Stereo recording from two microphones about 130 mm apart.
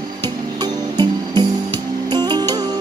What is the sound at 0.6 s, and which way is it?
Music, 35° right (ahead or behind).